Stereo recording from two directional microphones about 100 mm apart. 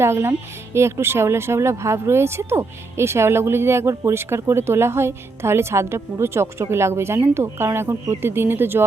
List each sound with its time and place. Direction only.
0.0 s speech: 25° right (ahead or behind)